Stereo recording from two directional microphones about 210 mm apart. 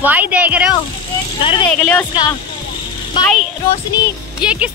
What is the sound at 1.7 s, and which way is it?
Speech, 5° left (ahead or behind).